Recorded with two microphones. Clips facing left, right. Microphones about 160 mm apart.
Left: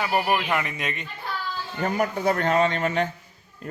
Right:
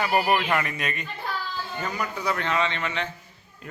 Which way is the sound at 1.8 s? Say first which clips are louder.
Left 7 dB; 50° left (ahead or behind).